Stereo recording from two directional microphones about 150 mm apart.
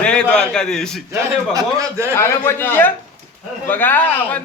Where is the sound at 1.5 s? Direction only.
20° right (ahead or behind).